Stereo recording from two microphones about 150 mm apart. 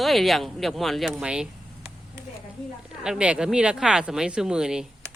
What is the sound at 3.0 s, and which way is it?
Speech, 5° right (ahead or behind).